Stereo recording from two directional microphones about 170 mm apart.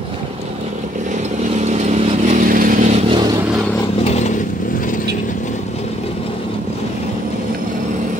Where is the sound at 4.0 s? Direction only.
40° left (ahead or behind).